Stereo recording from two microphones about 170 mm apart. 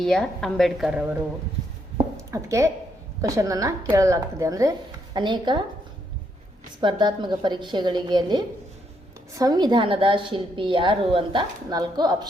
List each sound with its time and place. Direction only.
0.0 s a woman's voice: 5° left (ahead or behind)
2.1 s a woman's voice: 15° right (ahead or behind)
6.8 s a woman's voice: 25° right (ahead or behind)